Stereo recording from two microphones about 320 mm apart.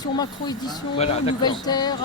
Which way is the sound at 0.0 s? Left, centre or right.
Centre.